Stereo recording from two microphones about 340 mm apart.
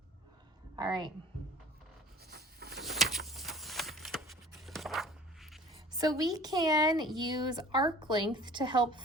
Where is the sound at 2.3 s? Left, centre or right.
Right.